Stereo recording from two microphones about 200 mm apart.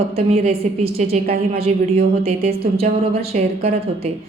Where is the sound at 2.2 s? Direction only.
30° right (ahead or behind).